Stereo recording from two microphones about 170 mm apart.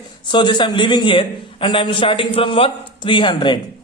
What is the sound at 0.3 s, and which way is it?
A man's voice, 25° left (ahead or behind).